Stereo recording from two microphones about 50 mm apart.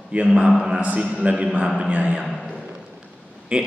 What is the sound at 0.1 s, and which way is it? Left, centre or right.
A man's voice, right.